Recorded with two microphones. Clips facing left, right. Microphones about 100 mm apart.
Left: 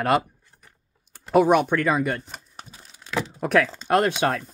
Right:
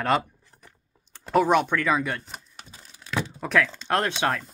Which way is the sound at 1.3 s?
10° left (ahead or behind).